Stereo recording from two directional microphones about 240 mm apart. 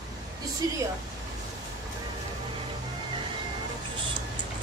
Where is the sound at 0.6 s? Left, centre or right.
Centre.